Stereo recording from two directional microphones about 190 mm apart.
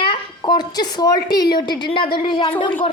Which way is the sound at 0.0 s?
25° left (ahead or behind).